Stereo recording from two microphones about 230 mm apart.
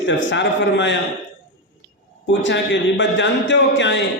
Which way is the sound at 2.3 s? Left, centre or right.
Left.